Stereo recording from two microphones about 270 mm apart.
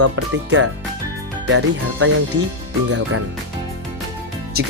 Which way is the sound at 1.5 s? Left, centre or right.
Right.